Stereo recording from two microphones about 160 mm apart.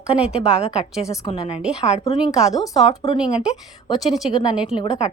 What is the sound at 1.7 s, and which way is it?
Speech, 45° left (ahead or behind).